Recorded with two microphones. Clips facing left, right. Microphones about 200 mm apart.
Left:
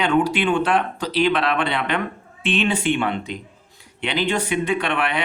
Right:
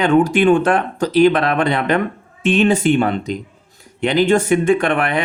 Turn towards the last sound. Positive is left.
turn(degrees=-45)  # may be behind; listen again after turning